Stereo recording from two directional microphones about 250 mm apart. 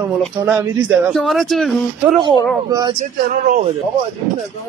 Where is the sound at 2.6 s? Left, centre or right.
Centre.